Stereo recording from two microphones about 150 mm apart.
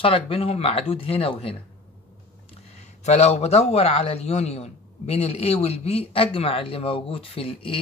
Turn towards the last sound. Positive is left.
turn(degrees=40)  # may be behind; listen again after turning